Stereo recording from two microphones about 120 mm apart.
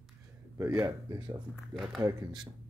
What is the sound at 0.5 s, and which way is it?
Speech, 25° right (ahead or behind).